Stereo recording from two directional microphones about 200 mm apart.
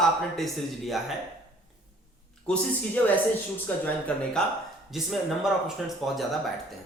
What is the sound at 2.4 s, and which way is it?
Speech, 5° left (ahead or behind).